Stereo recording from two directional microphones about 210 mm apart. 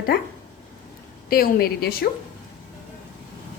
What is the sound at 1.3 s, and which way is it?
Speech, 45° left (ahead or behind).